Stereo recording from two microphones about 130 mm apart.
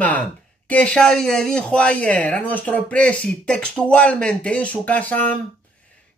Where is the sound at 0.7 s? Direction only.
10° left (ahead or behind).